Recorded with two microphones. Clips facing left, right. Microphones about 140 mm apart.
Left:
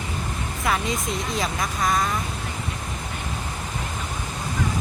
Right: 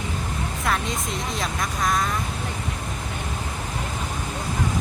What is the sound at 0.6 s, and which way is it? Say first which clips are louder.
Speech: left 2 dB; centre (ahead or behind).